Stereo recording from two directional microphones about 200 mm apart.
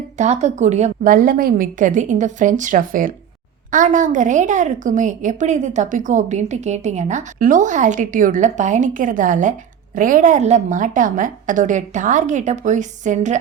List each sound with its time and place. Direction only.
0.2 s a woman's voice: 35° right (ahead or behind)